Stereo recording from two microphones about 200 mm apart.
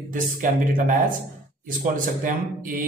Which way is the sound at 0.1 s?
45° right (ahead or behind).